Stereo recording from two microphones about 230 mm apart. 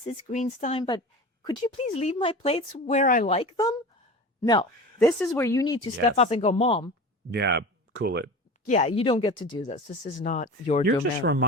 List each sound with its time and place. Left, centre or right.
0.3 s speech: left
5.0 s speech: centre
6.1 s speech: left
7.3 s speech: right
8.6 s speech: left
9.6 s speech: left
10.8 s speech: right